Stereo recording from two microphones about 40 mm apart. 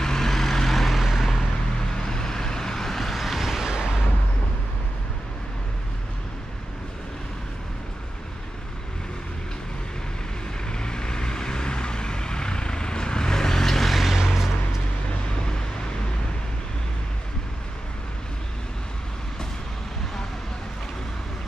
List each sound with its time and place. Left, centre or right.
0.0 s vehicle: centre
1.9 s vehicle: centre
3.7 s a sound: centre
10.7 s vehicle: centre